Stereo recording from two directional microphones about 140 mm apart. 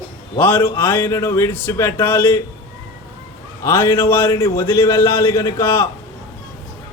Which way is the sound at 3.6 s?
20° left (ahead or behind).